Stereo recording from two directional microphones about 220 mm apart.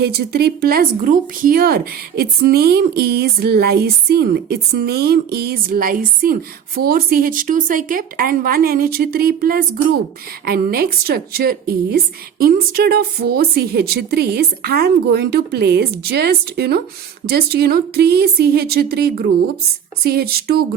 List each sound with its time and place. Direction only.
0.0 s speech: 45° right (ahead or behind)